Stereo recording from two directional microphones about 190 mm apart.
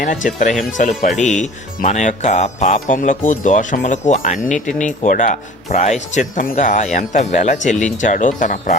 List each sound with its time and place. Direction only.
0.0 s speech: 45° left (ahead or behind)